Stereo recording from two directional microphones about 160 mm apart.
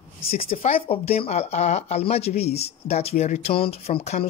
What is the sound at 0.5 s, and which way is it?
Speech, 35° left (ahead or behind).